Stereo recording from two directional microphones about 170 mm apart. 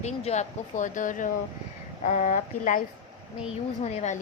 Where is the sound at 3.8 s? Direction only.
45° left (ahead or behind).